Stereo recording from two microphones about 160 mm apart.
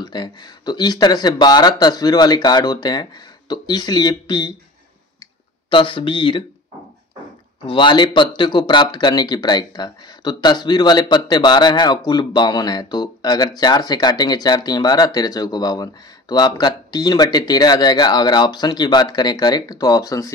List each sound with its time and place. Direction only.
0.0 s speech: 25° left (ahead or behind)
5.7 s speech: 30° left (ahead or behind)
7.6 s speech: 30° left (ahead or behind)